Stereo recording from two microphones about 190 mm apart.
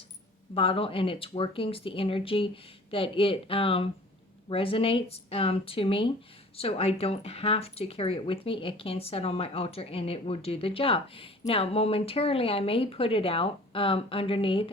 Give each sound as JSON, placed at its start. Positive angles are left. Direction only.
{"t": 0.5, "sound": "speech", "side_deg": 30}